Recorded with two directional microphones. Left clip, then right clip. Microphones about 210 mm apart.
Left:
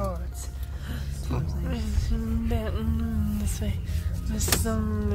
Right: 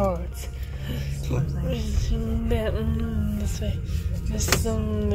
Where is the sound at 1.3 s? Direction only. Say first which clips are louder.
Right 4 dB; 5° left (ahead or behind).